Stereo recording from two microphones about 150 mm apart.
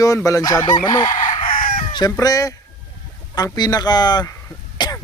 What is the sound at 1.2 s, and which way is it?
Chicken, 60° left (ahead or behind).